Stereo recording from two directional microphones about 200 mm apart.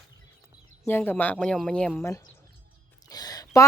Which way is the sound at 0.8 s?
10° left (ahead or behind).